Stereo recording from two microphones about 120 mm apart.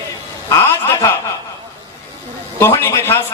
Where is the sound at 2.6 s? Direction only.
20° left (ahead or behind).